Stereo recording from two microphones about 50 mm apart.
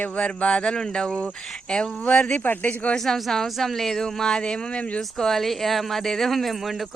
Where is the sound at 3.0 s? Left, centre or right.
Centre; by 5.3 s left.